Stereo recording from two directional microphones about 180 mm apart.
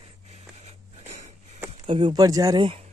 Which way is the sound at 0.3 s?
35° right (ahead or behind).